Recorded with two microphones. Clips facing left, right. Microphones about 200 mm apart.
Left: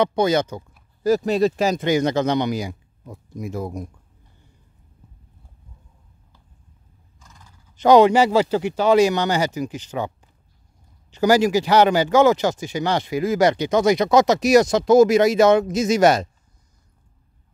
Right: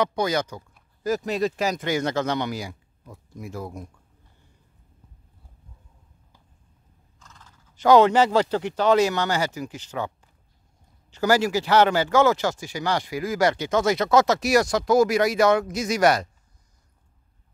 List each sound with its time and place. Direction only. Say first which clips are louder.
0.0 s speech: left 5 dB; 25° left (ahead or behind)
7.2 s speech: left 1 dB; 15° left (ahead or behind)